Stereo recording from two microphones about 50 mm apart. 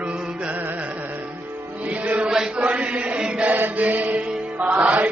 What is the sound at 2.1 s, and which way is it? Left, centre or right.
Chant, right.